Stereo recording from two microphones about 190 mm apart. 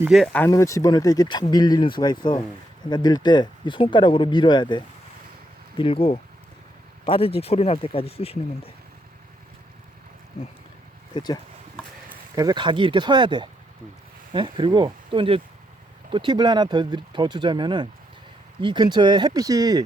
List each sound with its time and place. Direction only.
0.0 s speech: centre (ahead or behind)
0.4 s speech: 15° left (ahead or behind); by 8.7 s 30° left (ahead or behind)
10.4 s speech: 35° left (ahead or behind)
11.1 s speech: 20° left (ahead or behind)
12.0 s speech: 20° right (ahead or behind)